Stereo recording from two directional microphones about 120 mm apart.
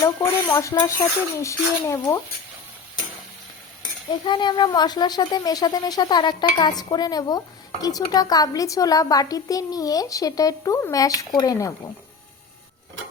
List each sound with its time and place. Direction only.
0.0 s speech: 25° left (ahead or behind)
4.1 s speech: 40° left (ahead or behind)